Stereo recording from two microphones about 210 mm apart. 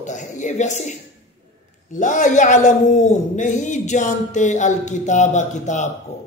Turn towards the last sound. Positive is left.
turn(degrees=35)  # may be behind; listen again after turning